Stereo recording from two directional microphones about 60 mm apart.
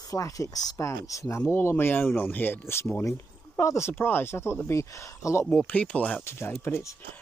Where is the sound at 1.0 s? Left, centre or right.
Left.